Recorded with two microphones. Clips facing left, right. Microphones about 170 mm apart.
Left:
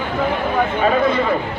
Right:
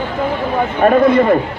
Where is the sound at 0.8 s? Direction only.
50° right (ahead or behind).